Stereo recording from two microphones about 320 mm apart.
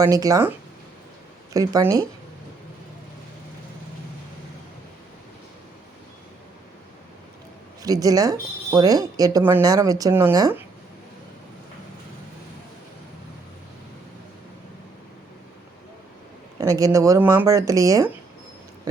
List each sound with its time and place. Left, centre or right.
0.0 s speech: centre
1.5 s speech: centre
7.8 s speech: centre
16.6 s speech: centre